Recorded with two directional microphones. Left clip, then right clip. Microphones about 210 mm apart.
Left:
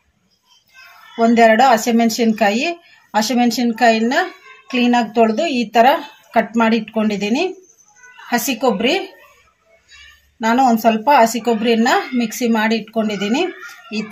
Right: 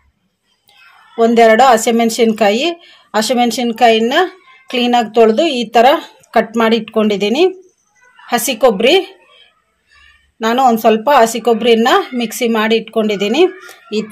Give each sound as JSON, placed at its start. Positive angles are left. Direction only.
{"t": 1.1, "sound": "speech", "side_deg": -35}
{"t": 10.4, "sound": "speech", "side_deg": -40}